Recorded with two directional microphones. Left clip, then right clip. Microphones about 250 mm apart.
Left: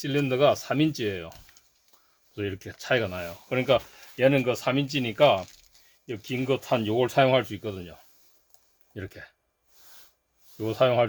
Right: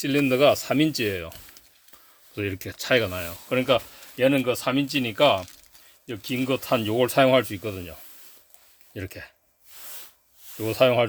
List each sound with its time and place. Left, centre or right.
0.0 s speech: right
9.0 s speech: right
10.6 s speech: right